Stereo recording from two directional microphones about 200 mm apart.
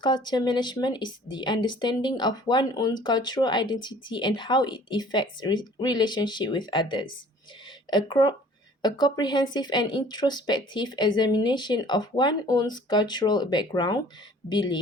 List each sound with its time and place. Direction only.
0.0 s a woman's voice: 20° left (ahead or behind)